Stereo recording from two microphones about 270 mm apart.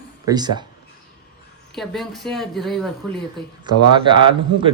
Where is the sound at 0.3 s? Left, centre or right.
Centre.